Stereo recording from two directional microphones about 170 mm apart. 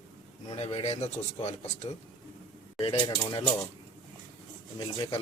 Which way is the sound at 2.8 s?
30° left (ahead or behind).